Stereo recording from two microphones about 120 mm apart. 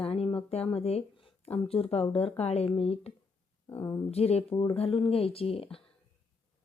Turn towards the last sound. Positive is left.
turn(degrees=50)  # may be behind; listen again after turning